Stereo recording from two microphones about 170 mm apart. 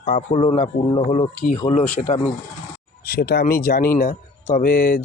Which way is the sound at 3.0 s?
65° left (ahead or behind).